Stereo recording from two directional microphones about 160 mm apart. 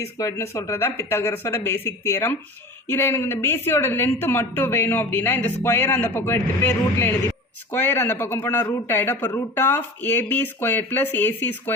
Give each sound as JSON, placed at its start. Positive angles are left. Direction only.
{"t": 0.2, "sound": "speech", "side_deg": 20}